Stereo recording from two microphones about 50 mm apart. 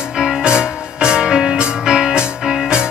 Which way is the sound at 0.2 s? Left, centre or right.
Centre.